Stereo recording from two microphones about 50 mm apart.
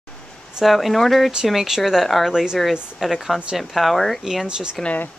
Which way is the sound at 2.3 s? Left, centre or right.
Centre.